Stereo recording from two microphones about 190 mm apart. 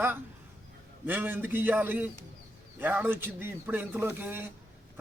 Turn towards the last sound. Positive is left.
turn(degrees=-10)  # may be behind; listen again after turning